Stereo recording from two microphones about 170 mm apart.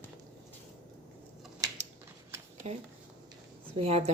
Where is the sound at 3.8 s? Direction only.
35° right (ahead or behind).